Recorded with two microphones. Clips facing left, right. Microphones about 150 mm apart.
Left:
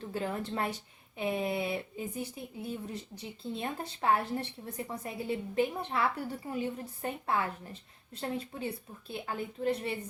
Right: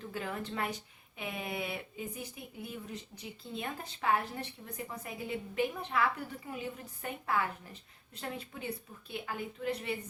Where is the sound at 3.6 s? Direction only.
35° left (ahead or behind).